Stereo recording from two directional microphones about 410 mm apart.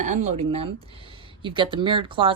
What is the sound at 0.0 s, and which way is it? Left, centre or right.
Speech, centre.